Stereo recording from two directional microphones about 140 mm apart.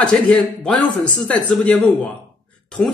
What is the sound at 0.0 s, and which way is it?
Speech, 5° left (ahead or behind).